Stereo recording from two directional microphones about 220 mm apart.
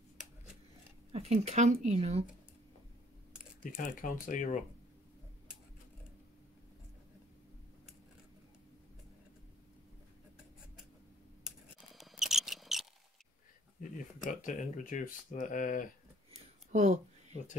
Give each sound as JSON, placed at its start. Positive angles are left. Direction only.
{"t": 1.1, "sound": "speech", "side_deg": -30}
{"t": 3.6, "sound": "speech", "side_deg": 40}
{"t": 11.4, "sound": "mouse", "side_deg": 0}
{"t": 14.4, "sound": "speech", "side_deg": 35}
{"t": 16.3, "sound": "a sound", "side_deg": -30}